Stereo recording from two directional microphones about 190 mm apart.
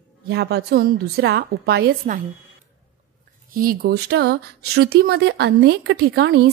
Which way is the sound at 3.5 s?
50° right (ahead or behind).